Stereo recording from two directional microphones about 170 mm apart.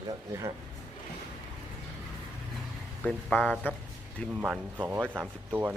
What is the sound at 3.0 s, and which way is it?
Speech, 5° left (ahead or behind).